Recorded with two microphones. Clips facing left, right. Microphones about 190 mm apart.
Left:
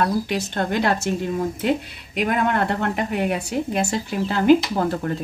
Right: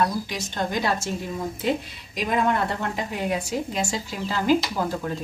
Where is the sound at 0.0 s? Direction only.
60° left (ahead or behind).